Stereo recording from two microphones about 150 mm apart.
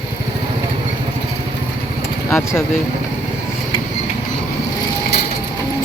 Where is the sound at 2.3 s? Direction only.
20° left (ahead or behind).